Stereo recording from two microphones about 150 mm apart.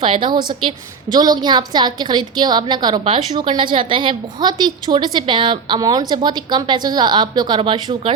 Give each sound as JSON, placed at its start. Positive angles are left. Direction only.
{"t": 0.0, "sound": "a woman's voice", "side_deg": -35}